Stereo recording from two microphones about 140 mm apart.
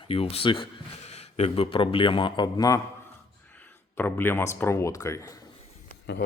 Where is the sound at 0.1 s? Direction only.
45° left (ahead or behind); by 2.8 s 25° left (ahead or behind).